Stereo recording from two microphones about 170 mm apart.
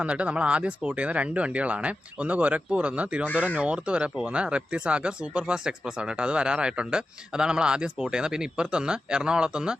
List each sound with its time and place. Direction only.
0.0 s speech: 5° right (ahead or behind)